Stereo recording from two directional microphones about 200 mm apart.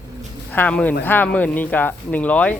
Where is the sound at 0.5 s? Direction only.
10° left (ahead or behind).